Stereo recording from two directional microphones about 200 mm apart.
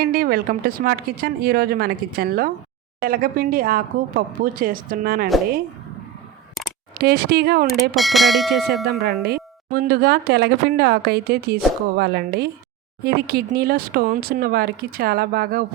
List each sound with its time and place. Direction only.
0.0 s speech: 50° right (ahead or behind)
7.0 s speech: 55° right (ahead or behind)
7.7 s speech: centre (ahead or behind)
9.2 s speech: 50° right (ahead or behind)